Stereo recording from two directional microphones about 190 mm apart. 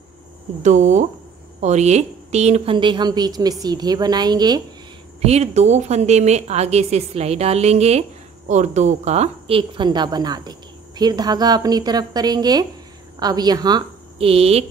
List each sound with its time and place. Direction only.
0.6 s a woman's voice: 40° right (ahead or behind); by 4.6 s 20° right (ahead or behind)
5.2 s a woman's voice: 35° right (ahead or behind)